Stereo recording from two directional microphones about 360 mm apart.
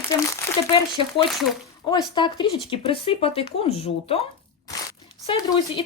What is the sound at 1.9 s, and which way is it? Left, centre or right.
Speech, centre.